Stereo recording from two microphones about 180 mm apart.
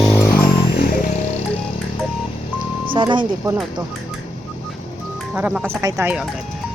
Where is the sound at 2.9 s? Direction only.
25° right (ahead or behind).